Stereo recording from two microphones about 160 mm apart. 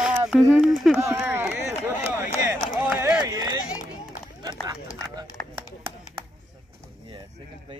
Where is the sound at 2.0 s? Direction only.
15° right (ahead or behind).